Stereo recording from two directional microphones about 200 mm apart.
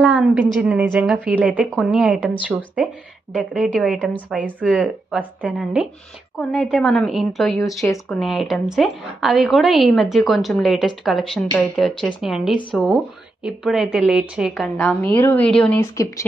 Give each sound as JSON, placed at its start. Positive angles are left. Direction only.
{"t": 0.0, "sound": "a woman's voice", "side_deg": -5}
{"t": 7.8, "sound": "a woman's voice", "side_deg": 15}
{"t": 8.2, "sound": "a woman's voice", "side_deg": 0}